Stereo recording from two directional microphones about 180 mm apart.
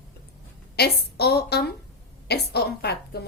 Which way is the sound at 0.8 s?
65° left (ahead or behind).